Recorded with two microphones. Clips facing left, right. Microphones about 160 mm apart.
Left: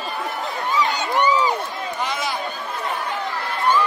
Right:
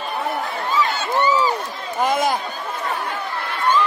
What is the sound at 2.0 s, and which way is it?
Run, 50° right (ahead or behind).